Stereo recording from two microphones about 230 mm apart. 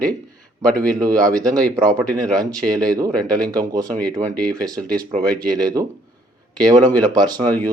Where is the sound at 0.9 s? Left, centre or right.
Centre.